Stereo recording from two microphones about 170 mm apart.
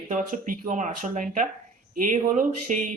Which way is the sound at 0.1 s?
50° right (ahead or behind).